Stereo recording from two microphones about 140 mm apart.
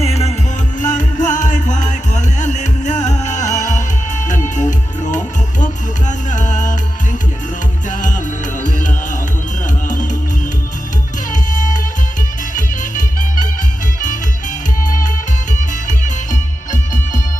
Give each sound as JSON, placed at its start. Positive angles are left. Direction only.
{"t": 0.0, "sound": "music", "side_deg": 50}
{"t": 0.8, "sound": "music", "side_deg": 65}
{"t": 9.9, "sound": "music", "side_deg": 65}
{"t": 11.3, "sound": "music", "side_deg": 65}
{"t": 15.5, "sound": "music", "side_deg": 65}